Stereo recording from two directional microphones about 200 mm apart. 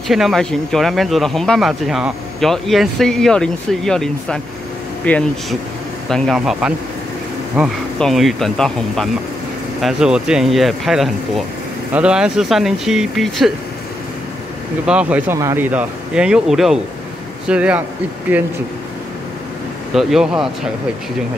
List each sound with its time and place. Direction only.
0.1 s speech: centre (ahead or behind)
14.9 s speech: 5° right (ahead or behind)
19.9 s speech: centre (ahead or behind)